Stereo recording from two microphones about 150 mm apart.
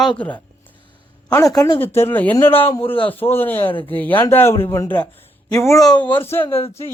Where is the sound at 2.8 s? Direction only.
35° left (ahead or behind).